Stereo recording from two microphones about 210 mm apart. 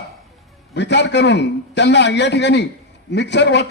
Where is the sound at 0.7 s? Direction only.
55° left (ahead or behind).